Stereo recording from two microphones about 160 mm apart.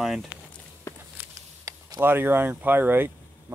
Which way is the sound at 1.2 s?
15° right (ahead or behind).